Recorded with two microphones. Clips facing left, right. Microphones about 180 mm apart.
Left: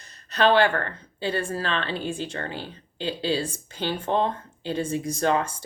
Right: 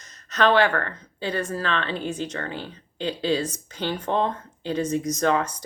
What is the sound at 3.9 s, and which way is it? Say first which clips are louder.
Speech: even; 30° left (ahead or behind).